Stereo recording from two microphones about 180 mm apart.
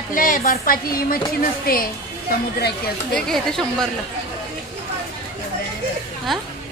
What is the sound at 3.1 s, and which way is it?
Speech, 5° left (ahead or behind).